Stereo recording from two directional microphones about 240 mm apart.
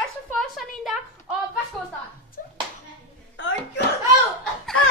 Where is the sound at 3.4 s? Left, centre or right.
Left.